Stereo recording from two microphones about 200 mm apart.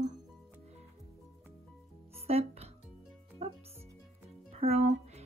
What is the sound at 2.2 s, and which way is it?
Music, 30° right (ahead or behind).